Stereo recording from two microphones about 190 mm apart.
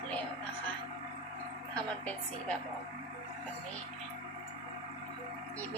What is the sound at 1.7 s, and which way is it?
Speech, 5° left (ahead or behind).